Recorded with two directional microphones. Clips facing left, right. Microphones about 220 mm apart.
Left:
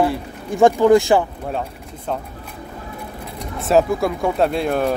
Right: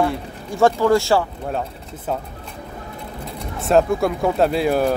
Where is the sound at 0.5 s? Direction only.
15° left (ahead or behind).